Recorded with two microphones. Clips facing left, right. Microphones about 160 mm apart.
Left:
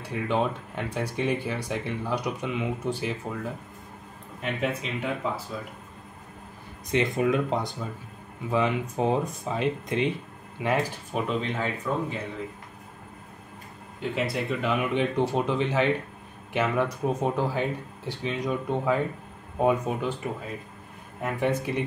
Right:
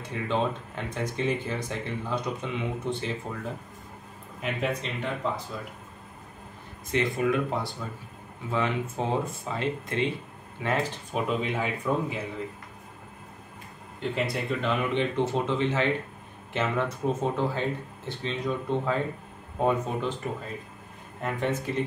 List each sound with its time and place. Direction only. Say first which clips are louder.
0.1 s speech: left 2 dB; 15° left (ahead or behind)
4.4 s speech: left 1 dB; centre (ahead or behind)
6.9 s speech: left 2 dB; 20° left (ahead or behind)
11.1 s speech: even; 5° right (ahead or behind)
14.0 s speech: left 1 dB; centre (ahead or behind)
21.2 s speech: left 2 dB; 10° left (ahead or behind)